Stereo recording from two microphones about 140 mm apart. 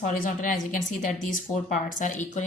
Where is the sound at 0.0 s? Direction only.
70° left (ahead or behind).